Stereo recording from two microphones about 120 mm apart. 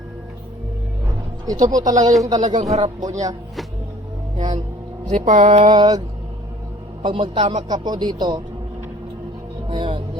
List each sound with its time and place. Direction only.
1.5 s speech: 30° right (ahead or behind)
1.8 s speech: 90° right; by 2.9 s 70° right (ahead or behind)
3.0 s speech: 30° right (ahead or behind)
5.1 s speech: 90° right
5.7 s speech: 35° right (ahead or behind)
7.0 s a man's voice: 45° right (ahead or behind)
9.6 s music: 45° right (ahead or behind)